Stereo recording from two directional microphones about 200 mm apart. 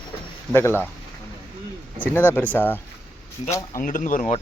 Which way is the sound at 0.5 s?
10° left (ahead or behind).